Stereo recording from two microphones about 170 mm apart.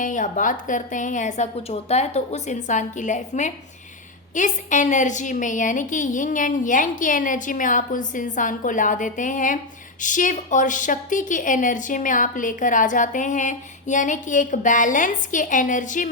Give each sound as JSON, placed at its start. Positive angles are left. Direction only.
{"t": 0.0, "sound": "a woman's voice", "side_deg": 50}